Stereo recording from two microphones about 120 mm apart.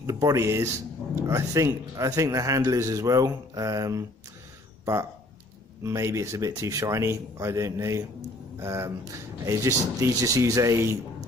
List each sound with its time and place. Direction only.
0.0 s a man's voice: 30° right (ahead or behind)
5.9 s a man's voice: 25° right (ahead or behind)